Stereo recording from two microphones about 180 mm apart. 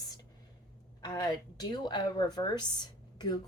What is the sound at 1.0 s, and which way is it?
Speech, 20° left (ahead or behind).